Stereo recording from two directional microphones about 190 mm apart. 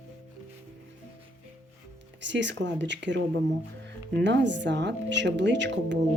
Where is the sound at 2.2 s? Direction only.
70° right (ahead or behind).